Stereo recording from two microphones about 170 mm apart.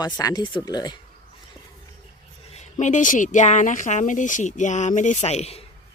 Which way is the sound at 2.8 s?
50° left (ahead or behind).